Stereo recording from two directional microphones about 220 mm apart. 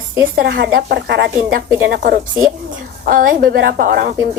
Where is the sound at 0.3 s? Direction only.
45° right (ahead or behind).